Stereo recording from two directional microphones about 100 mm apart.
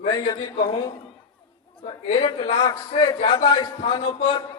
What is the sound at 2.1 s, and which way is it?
A man's voice, 65° left (ahead or behind).